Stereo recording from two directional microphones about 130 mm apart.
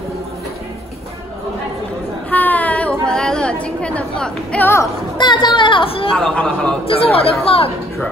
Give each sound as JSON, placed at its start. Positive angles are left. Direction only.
{"t": 2.3, "sound": "chatter", "side_deg": 10}
{"t": 5.1, "sound": "a woman's voice", "side_deg": 35}
{"t": 6.1, "sound": "a man's voice", "side_deg": 5}
{"t": 7.0, "sound": "speech", "side_deg": 50}